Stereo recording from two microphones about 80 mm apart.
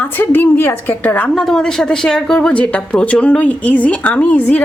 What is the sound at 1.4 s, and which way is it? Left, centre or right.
A woman's voice, centre.